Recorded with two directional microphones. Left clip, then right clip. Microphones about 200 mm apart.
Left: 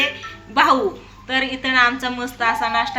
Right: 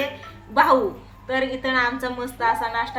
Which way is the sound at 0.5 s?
15° left (ahead or behind).